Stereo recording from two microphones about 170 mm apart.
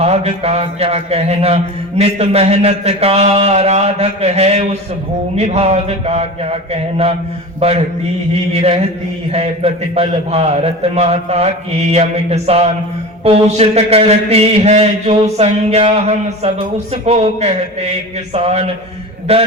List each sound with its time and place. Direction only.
0.0 s speech: 40° right (ahead or behind)
9.3 s speech: 35° right (ahead or behind)